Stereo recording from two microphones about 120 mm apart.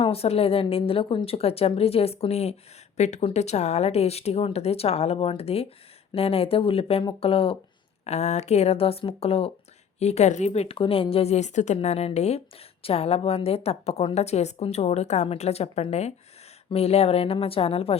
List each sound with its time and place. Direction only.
0.0 s a woman's voice: 55° left (ahead or behind)
3.0 s a woman's voice: 70° left (ahead or behind); by 7.5 s 50° left (ahead or behind)
8.0 s a woman's voice: 65° left (ahead or behind)
10.0 s a woman's voice: 65° left (ahead or behind)